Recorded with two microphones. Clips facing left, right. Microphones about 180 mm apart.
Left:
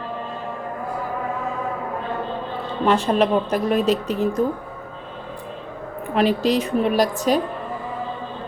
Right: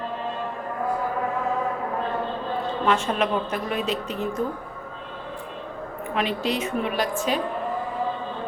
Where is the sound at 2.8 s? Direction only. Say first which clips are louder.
Left 6 dB; 35° left (ahead or behind).